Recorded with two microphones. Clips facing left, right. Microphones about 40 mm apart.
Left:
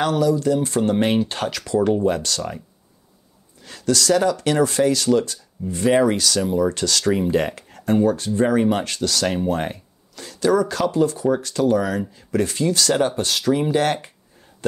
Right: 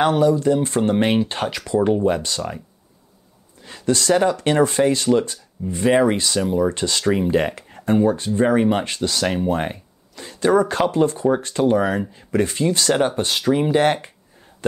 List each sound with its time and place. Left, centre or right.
0.0 s speech: right
3.6 s speech: right
5.8 s speech: centre
10.2 s speech: right